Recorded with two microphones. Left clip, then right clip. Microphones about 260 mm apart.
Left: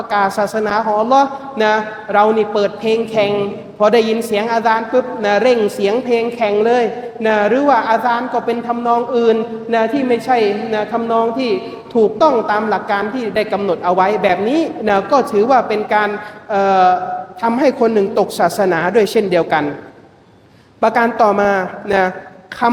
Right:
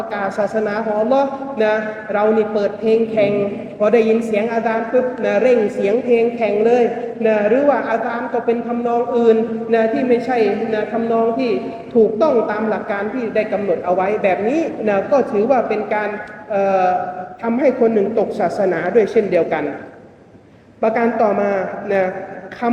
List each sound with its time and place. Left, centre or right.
0.1 s a woman's voice: left
20.8 s a woman's voice: left